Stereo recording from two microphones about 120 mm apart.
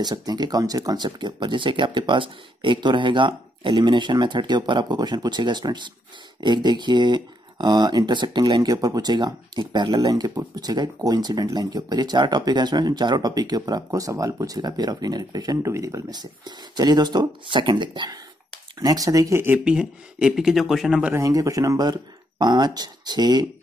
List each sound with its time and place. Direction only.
0.0 s speech: 35° right (ahead or behind)
18.8 s speech: 30° right (ahead or behind)
19.6 s speech: 10° right (ahead or behind)
21.1 s speech: 30° right (ahead or behind)